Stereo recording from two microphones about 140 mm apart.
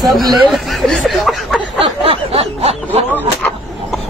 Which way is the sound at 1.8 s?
45° right (ahead or behind).